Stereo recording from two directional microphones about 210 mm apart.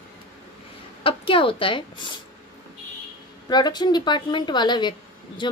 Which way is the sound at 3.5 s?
20° left (ahead or behind).